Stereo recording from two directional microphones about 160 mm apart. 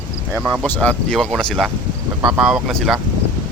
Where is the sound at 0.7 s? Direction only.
5° left (ahead or behind).